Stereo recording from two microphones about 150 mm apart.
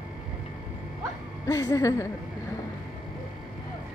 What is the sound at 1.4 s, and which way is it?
Speech, 25° left (ahead or behind).